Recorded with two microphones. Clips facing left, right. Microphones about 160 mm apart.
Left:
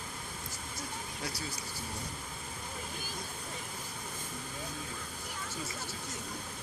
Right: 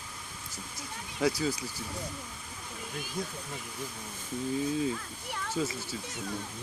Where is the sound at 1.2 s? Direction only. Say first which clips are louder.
Right 14 dB; 90° right.